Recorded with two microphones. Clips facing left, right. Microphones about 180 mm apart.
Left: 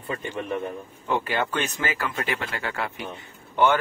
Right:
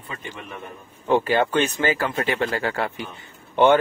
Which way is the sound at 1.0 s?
30° right (ahead or behind).